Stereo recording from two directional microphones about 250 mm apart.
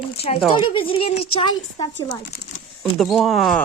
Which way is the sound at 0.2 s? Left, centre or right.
Left.